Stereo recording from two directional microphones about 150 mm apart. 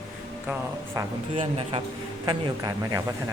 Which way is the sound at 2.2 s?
25° right (ahead or behind).